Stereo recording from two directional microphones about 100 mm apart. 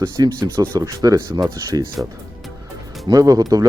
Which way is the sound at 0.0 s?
40° right (ahead or behind).